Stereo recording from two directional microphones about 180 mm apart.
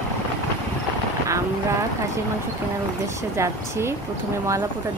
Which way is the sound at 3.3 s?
15° right (ahead or behind).